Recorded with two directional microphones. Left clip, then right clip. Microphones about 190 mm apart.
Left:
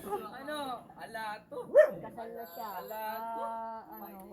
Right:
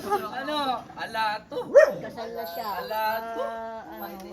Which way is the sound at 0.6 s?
Centre (ahead or behind).